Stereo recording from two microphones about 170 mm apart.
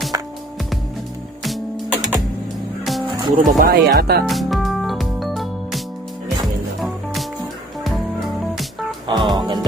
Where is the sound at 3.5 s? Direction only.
65° right (ahead or behind).